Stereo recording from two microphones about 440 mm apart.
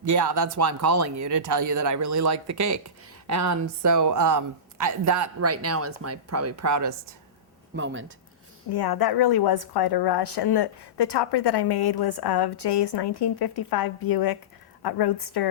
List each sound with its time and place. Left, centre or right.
0.4 s speech: right
7.8 s speech: right
8.7 s a woman's voice: left